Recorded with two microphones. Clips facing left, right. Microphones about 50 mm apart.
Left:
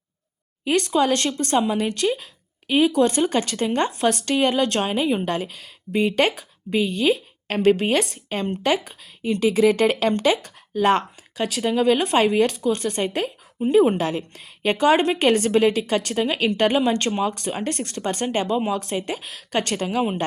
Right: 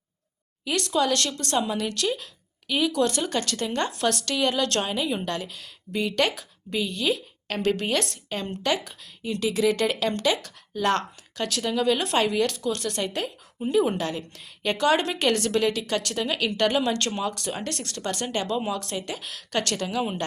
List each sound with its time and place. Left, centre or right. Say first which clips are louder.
0.6 s a woman's voice: left 5 dB; left